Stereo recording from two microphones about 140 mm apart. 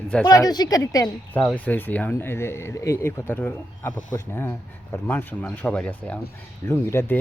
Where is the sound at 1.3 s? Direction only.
10° left (ahead or behind).